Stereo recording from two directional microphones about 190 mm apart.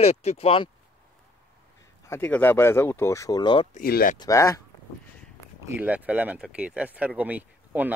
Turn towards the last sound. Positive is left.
turn(degrees=-10)  # may be behind; listen again after turning